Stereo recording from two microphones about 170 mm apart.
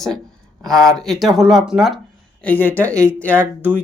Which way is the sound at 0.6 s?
5° left (ahead or behind).